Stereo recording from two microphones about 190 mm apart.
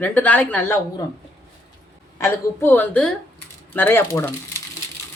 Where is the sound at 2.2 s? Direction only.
10° left (ahead or behind).